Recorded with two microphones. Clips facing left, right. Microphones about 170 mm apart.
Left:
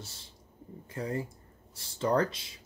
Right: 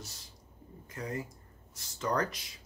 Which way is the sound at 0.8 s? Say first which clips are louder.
Left 4 dB; 30° left (ahead or behind).